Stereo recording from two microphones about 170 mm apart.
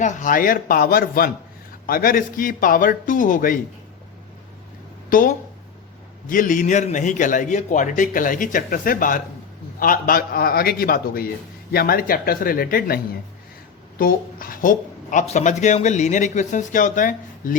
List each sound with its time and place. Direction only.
0.0 s a man's voice: 45° left (ahead or behind)
5.0 s a man's voice: 55° left (ahead or behind)
14.0 s speech: 55° left (ahead or behind)